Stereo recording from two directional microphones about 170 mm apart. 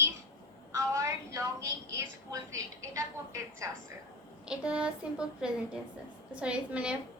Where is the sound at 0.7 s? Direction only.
15° right (ahead or behind).